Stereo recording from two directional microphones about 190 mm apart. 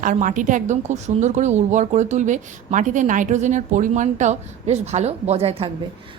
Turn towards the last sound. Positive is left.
turn(degrees=-30)  # may be behind; listen again after turning